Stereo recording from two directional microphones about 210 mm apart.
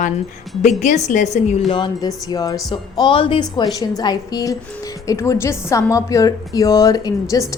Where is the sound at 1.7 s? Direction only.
20° left (ahead or behind).